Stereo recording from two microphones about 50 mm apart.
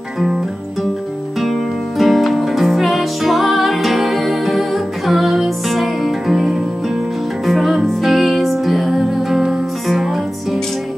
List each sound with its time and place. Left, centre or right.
1.4 s music: centre